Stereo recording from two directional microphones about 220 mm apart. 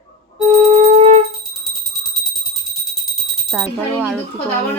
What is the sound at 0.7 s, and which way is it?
Music, 30° right (ahead or behind).